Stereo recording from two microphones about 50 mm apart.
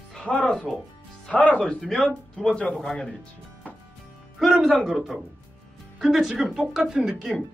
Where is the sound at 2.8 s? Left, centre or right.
Centre.